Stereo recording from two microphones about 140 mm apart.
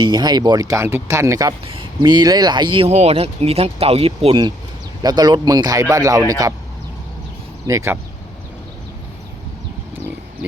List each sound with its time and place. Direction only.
0.0 s speech: 30° right (ahead or behind)
1.6 s a sound: 40° right (ahead or behind)
2.0 s speech: 30° right (ahead or behind)
2.9 s speech: 50° right (ahead or behind)
5.0 s speech: 30° right (ahead or behind)
7.7 s speech: 20° right (ahead or behind)